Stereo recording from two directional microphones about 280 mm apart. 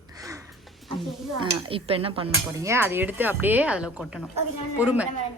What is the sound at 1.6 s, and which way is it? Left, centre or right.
Speech, centre.